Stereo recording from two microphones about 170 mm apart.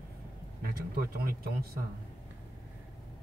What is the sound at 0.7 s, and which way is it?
Speech, 60° right (ahead or behind).